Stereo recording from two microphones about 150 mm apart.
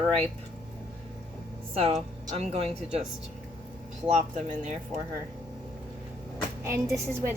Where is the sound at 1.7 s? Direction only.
40° right (ahead or behind).